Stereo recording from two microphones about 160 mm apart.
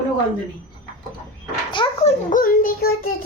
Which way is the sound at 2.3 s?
60° left (ahead or behind).